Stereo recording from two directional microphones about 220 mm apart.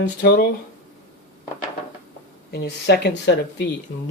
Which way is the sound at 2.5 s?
50° left (ahead or behind).